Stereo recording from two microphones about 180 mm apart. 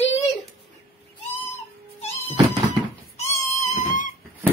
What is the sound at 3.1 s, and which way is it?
Music, 40° left (ahead or behind).